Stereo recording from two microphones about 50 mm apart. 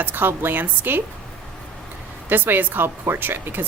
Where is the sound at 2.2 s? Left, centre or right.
Right.